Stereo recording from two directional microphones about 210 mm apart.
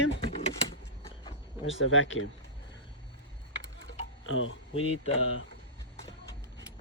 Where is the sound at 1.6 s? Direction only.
65° left (ahead or behind).